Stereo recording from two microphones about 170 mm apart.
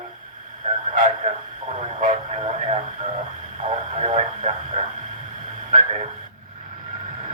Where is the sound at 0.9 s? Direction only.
45° right (ahead or behind).